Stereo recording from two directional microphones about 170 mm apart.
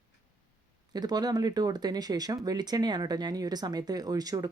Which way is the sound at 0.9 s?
25° right (ahead or behind).